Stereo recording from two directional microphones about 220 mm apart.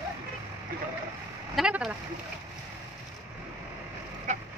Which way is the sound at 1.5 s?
5° right (ahead or behind).